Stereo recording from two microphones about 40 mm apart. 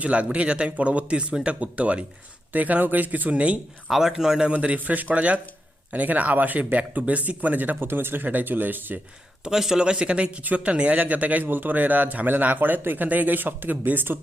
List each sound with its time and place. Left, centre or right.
0.0 s speech: right
3.8 s a man's voice: centre
4.5 s speech: right
7.8 s speech: right
8.3 s speech: right
9.7 s speech: right
10.4 s speech: right
11.4 s speech: right